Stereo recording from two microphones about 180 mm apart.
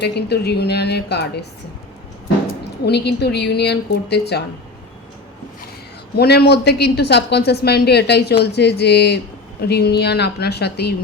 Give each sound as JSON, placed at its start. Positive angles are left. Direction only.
{"t": 0.0, "sound": "speech", "side_deg": 65}
{"t": 2.8, "sound": "a woman's voice", "side_deg": 65}
{"t": 6.1, "sound": "speech", "side_deg": 65}